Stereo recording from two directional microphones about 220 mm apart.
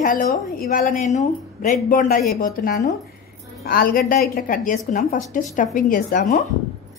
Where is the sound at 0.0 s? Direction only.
35° left (ahead or behind).